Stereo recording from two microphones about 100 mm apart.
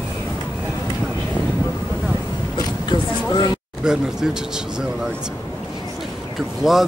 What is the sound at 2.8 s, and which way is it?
Vehicle, 45° left (ahead or behind).